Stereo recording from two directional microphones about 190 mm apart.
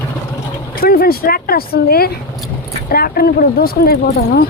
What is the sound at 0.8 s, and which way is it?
Speech, 55° left (ahead or behind).